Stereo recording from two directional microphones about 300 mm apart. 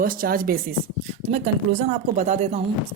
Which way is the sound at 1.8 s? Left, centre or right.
Right.